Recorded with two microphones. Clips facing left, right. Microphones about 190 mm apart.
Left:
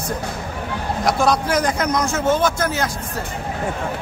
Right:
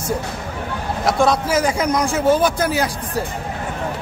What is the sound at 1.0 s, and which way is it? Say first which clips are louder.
A man's voice: right 1 dB; centre (ahead or behind).